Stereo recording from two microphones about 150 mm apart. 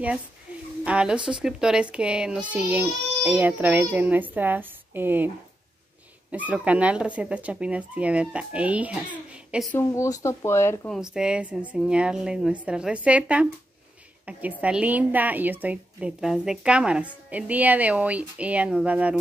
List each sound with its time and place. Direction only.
0.8 s a woman's voice: 5° right (ahead or behind)
6.3 s a woman's voice: 10° right (ahead or behind)
9.7 s speech: 20° left (ahead or behind)
10.9 s a woman's voice: 5° right (ahead or behind)
14.6 s a woman's voice: 10° right (ahead or behind)